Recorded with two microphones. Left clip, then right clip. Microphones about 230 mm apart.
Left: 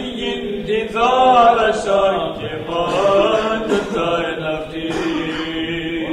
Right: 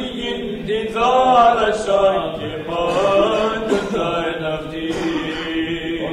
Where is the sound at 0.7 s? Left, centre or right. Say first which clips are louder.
Left 1 dB; left.